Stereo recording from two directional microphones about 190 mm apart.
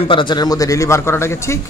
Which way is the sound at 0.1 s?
25° left (ahead or behind).